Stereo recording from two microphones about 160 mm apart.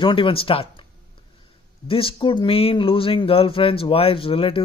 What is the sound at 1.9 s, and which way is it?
Speech, 35° left (ahead or behind).